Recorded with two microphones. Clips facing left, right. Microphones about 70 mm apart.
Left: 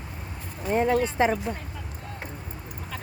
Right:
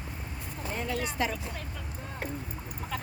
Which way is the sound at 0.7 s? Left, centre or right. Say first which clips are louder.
Left 11 dB; left.